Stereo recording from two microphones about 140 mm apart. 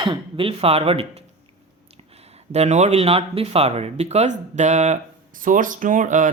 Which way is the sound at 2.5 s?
50° right (ahead or behind).